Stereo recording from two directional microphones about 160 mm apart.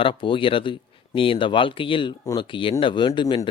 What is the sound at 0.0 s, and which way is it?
Speech, 30° left (ahead or behind).